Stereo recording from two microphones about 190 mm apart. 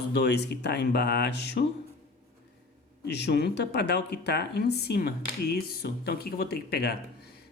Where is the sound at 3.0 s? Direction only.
60° left (ahead or behind).